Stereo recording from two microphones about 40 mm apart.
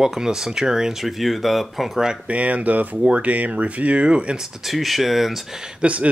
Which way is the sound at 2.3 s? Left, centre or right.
Right.